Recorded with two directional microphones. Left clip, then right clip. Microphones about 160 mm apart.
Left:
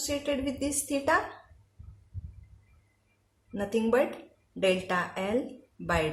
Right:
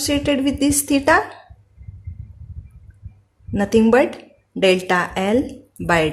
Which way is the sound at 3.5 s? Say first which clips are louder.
Right 11 dB; 55° right (ahead or behind).